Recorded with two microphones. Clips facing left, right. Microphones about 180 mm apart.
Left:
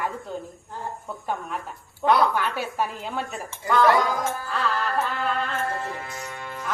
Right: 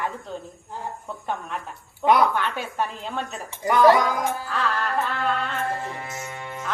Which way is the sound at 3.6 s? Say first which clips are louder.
Right 3 dB; 20° right (ahead or behind).